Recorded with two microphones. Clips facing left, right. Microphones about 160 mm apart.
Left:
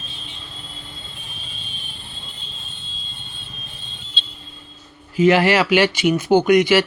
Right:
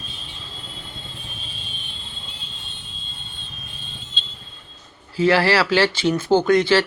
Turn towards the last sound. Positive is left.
turn(degrees=15)  # may be behind; listen again after turning